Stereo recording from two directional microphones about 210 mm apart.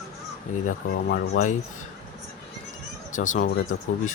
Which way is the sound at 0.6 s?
45° left (ahead or behind).